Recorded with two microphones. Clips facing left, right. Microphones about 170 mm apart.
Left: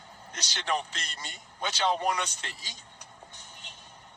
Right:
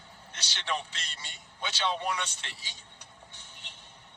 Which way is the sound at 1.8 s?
40° left (ahead or behind).